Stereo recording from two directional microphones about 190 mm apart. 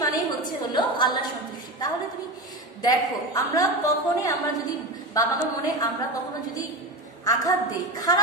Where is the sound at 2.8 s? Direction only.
20° left (ahead or behind).